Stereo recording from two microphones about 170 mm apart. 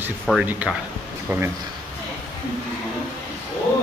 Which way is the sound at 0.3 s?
5° right (ahead or behind).